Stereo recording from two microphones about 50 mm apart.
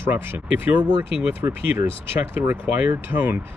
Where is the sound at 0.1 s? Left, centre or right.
Right.